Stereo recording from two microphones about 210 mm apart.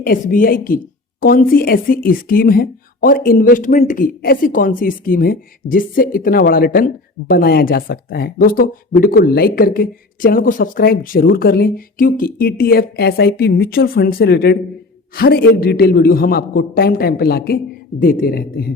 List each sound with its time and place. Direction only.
0.0 s a woman's voice: 40° left (ahead or behind)